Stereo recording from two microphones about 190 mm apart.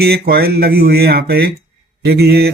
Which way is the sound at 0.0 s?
55° right (ahead or behind).